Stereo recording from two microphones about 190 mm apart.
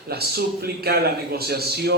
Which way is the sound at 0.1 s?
55° right (ahead or behind).